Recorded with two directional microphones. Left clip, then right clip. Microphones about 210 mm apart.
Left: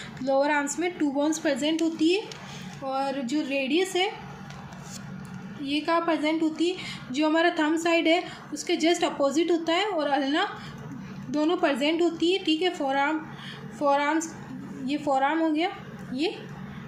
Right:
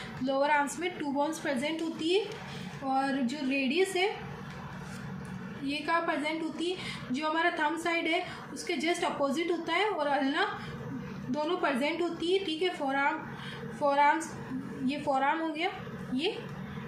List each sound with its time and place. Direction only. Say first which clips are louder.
0.3 s a woman's voice: left 4 dB; 35° left (ahead or behind)
5.6 s a woman's voice: left 5 dB; 40° left (ahead or behind)